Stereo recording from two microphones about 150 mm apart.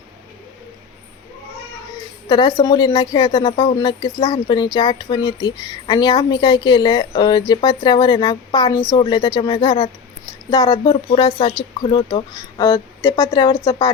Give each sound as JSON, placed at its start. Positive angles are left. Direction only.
{"t": 2.3, "sound": "speech", "side_deg": 30}
{"t": 4.2, "sound": "speech", "side_deg": 25}